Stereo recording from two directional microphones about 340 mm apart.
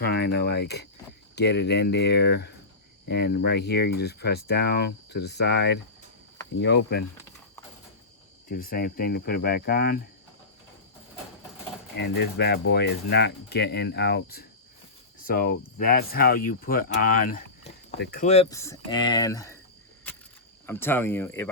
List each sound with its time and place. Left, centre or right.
0.0 s speech: left
8.4 s speech: left
11.9 s speech: left; by 19.5 s centre
20.7 s speech: centre